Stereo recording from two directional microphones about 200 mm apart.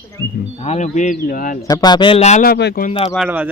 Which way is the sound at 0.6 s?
35° left (ahead or behind).